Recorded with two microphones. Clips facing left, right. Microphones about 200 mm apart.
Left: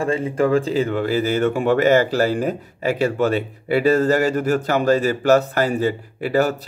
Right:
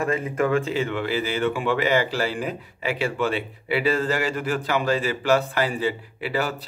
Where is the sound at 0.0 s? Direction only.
30° left (ahead or behind).